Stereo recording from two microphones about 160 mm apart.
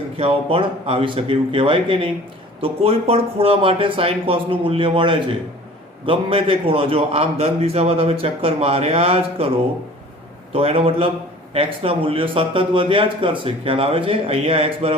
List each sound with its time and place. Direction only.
0.2 s speech: 35° right (ahead or behind)
10.5 s speech: 35° right (ahead or behind)